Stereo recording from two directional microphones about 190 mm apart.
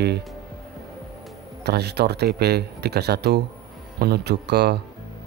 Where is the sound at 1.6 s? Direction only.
60° right (ahead or behind).